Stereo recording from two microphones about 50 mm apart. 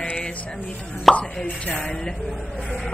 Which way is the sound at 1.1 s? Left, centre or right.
Centre.